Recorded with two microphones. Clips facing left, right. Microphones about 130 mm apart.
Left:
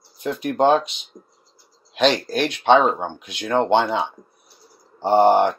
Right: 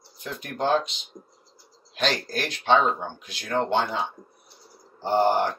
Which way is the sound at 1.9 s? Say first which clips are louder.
Left 8 dB; 75° left (ahead or behind).